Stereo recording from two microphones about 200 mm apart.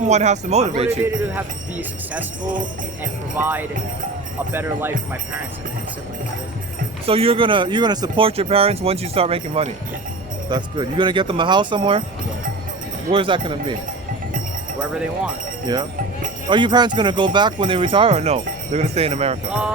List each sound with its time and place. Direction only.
0.1 s speech: 35° right (ahead or behind)
0.9 s speech: 10° right (ahead or behind)
3.3 s speech: 10° right (ahead or behind)
7.0 s speech: 30° right (ahead or behind)
13.1 s speech: 25° right (ahead or behind)
14.8 s speech: 5° right (ahead or behind)
15.6 s speech: 20° right (ahead or behind)
19.5 s speech: 5° right (ahead or behind)